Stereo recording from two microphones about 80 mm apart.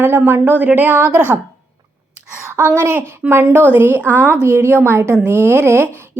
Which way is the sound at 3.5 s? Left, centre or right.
Right.